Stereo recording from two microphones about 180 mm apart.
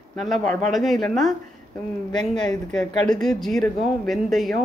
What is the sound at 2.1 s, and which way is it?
Speech, 20° left (ahead or behind).